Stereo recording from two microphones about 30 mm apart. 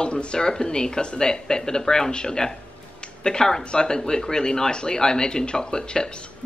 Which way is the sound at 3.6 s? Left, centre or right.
Left.